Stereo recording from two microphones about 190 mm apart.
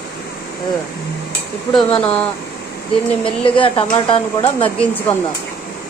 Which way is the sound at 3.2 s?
25° left (ahead or behind).